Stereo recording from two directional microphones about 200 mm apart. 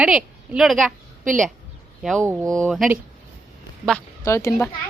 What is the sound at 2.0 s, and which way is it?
Speech, centre (ahead or behind).